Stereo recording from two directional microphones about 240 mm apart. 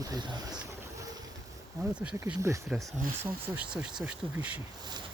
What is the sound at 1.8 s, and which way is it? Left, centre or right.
Speech, centre.